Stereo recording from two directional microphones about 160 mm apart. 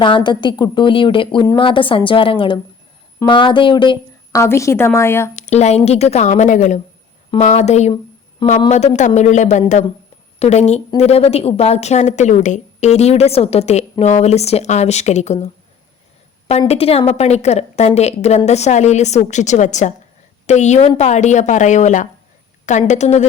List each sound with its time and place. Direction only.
0.0 s a woman's voice: 30° left (ahead or behind)
4.4 s a woman's voice: 20° left (ahead or behind)
5.4 s a woman's voice: 45° left (ahead or behind)
16.5 s a woman's voice: 40° left (ahead or behind)